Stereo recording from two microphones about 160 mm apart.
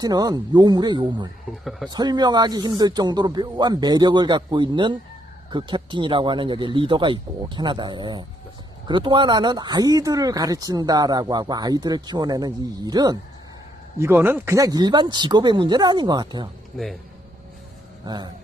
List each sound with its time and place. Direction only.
0.0 s speech: 25° right (ahead or behind)
14.0 s speech: 15° right (ahead or behind)
16.7 s speech: centre (ahead or behind)
18.0 s a man's voice: 25° right (ahead or behind)